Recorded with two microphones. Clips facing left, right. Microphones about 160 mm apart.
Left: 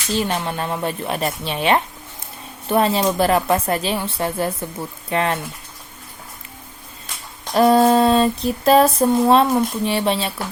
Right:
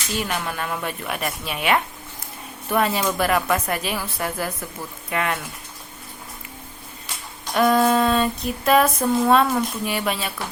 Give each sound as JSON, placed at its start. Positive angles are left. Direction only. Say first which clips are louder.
{"t": 0.1, "sound": "speech", "louder": "left 5 dB", "side_deg": 30}
{"t": 7.5, "sound": "female singing", "louder": "left 4 dB", "side_deg": 30}